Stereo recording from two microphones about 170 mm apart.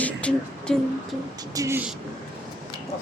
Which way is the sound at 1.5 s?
15° right (ahead or behind).